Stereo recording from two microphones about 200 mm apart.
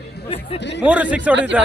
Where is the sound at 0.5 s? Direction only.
60° left (ahead or behind).